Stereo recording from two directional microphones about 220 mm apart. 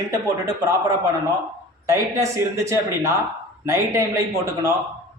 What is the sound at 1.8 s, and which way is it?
A man's voice, 15° right (ahead or behind).